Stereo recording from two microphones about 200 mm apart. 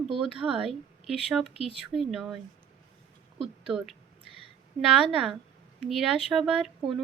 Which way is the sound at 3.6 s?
Centre (ahead or behind).